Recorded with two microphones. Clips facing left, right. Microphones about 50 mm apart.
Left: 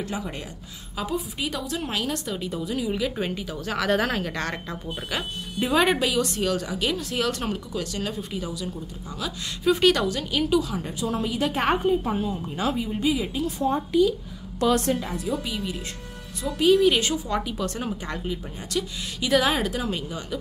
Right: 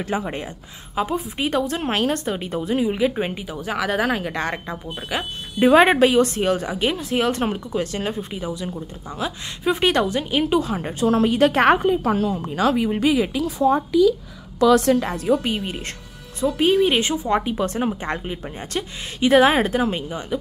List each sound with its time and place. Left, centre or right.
0.1 s a woman's voice: right; by 5.3 s centre
5.6 s speech: right
11.1 s a woman's voice: right
14.9 s a woman's voice: right
16.3 s speech: right
18.0 s speech: right